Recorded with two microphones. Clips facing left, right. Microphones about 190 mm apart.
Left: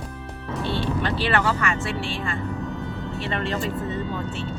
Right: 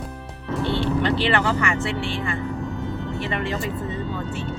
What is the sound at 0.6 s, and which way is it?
Speech, 20° right (ahead or behind).